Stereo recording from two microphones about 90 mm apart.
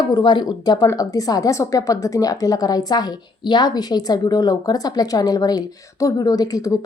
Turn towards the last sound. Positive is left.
turn(degrees=40)  # may be behind; listen again after turning